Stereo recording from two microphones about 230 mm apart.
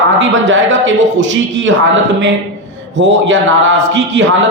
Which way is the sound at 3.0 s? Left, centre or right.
Right.